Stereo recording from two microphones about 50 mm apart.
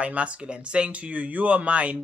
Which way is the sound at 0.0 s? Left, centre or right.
Right.